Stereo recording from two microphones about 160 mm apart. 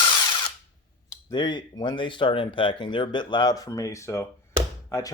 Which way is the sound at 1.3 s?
30° left (ahead or behind).